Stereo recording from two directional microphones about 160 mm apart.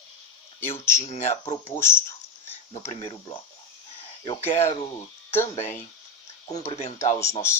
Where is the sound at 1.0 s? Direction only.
40° left (ahead or behind).